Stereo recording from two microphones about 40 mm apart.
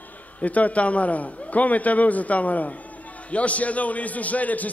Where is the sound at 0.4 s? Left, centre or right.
Left.